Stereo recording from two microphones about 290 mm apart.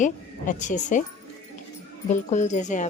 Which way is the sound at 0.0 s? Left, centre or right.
Left.